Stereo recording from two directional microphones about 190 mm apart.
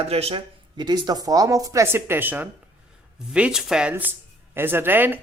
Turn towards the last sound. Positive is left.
turn(degrees=-10)  # may be behind; listen again after turning